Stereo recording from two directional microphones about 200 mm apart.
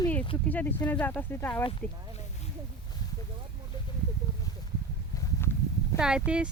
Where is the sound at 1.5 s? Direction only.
25° left (ahead or behind).